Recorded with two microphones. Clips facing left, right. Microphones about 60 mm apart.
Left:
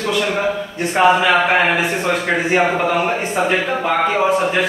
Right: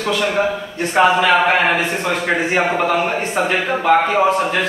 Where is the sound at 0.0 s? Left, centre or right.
Centre.